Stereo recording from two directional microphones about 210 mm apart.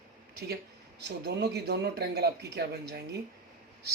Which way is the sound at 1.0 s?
50° right (ahead or behind).